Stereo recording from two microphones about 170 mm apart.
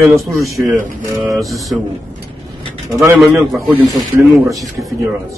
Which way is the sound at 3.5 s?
Centre (ahead or behind).